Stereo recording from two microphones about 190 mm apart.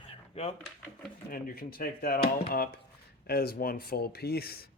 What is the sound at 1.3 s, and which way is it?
Speech, 50° left (ahead or behind).